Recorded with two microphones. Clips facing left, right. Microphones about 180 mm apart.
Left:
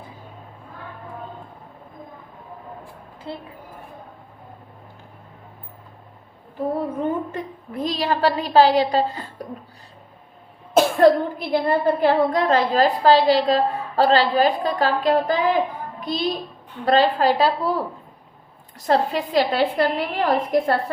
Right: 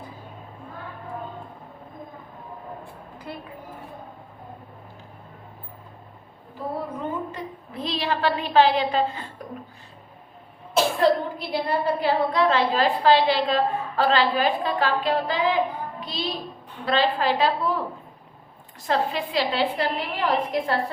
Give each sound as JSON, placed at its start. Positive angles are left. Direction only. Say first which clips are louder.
{"t": 3.3, "sound": "a woman's voice", "louder": "left 4 dB", "side_deg": 25}
{"t": 7.0, "sound": "a sound", "louder": "left 5 dB", "side_deg": 55}
{"t": 10.8, "sound": "speech", "louder": "left 5 dB", "side_deg": 50}
{"t": 16.8, "sound": "a woman's voice", "louder": "left 5 dB", "side_deg": 45}